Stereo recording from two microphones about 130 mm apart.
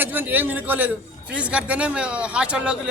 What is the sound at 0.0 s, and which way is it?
A man's voice, 15° right (ahead or behind).